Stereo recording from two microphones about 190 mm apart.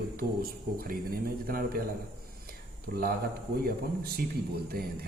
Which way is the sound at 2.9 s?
55° right (ahead or behind).